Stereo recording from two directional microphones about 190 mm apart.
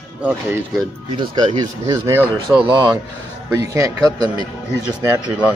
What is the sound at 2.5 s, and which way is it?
Speech, 5° right (ahead or behind).